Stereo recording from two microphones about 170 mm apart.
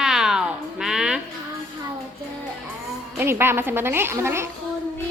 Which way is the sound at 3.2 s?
15° right (ahead or behind).